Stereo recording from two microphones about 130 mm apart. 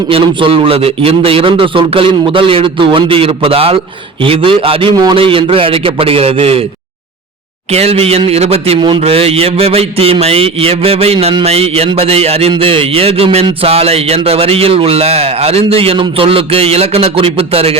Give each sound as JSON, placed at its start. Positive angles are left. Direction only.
{"t": 0.1, "sound": "a man's voice", "side_deg": -45}
{"t": 7.7, "sound": "a man's voice", "side_deg": -50}